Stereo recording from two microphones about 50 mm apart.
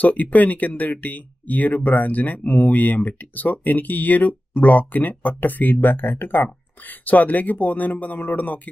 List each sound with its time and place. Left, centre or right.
0.0 s speech: left